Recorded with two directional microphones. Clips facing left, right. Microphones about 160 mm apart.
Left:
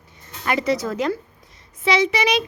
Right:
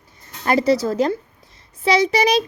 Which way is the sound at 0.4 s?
35° right (ahead or behind).